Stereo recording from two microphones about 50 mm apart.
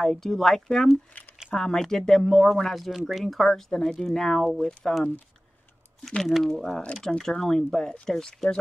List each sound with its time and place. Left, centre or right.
0.0 s speech: centre
0.6 s speech: centre
6.0 s speech: centre